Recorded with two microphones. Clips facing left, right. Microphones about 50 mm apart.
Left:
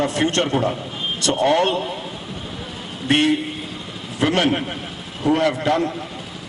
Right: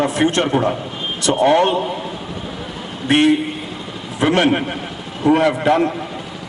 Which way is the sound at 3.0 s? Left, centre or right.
Centre.